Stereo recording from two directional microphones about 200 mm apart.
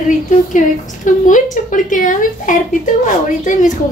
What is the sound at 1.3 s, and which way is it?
A woman's voice, 40° left (ahead or behind).